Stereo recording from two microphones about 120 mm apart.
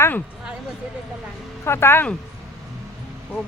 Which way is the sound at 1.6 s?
20° left (ahead or behind).